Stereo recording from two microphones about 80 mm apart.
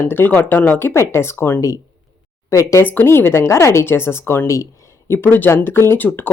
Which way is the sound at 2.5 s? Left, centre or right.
Left.